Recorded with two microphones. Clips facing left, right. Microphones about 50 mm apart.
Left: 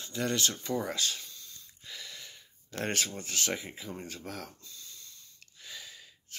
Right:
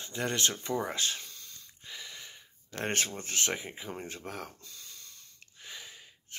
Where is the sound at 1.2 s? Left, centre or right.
Right.